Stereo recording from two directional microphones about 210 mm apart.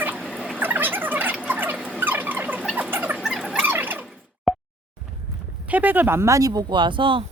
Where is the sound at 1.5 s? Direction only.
10° right (ahead or behind).